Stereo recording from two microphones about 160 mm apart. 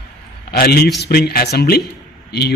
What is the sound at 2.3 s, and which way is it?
Speech, 90° left.